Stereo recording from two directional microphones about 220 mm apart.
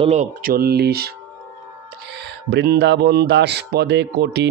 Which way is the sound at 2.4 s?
50° right (ahead or behind).